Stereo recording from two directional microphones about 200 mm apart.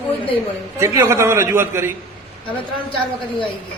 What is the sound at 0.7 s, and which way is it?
A man's voice, 15° right (ahead or behind).